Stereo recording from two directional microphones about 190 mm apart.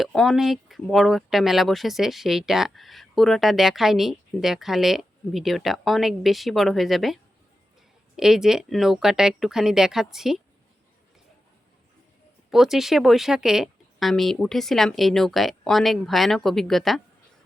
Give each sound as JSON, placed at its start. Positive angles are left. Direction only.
{"t": 0.0, "sound": "speech", "side_deg": 0}
{"t": 12.5, "sound": "speech", "side_deg": 0}